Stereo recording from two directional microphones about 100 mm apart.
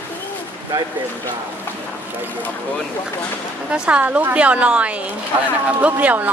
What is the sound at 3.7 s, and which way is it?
Speech, 10° right (ahead or behind).